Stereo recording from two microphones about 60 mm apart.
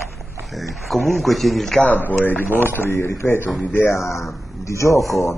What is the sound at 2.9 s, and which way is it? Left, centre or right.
A man's voice, left.